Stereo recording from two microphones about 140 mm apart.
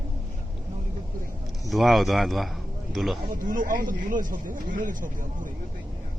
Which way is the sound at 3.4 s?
75° right (ahead or behind).